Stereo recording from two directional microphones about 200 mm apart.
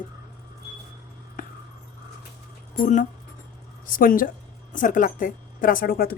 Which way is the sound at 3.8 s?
45° left (ahead or behind).